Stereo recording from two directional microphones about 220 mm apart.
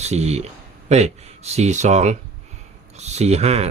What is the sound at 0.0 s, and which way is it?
Speech, 30° right (ahead or behind).